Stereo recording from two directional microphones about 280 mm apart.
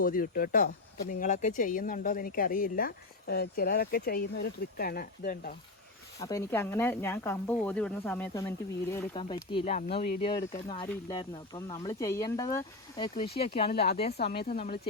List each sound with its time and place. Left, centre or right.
0.0 s speech: left
6.1 s speech: centre; by 10.2 s left
10.2 s speech: centre
13.7 s speech: left
14.5 s speech: left